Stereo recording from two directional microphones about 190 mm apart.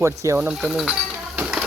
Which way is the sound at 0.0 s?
15° right (ahead or behind).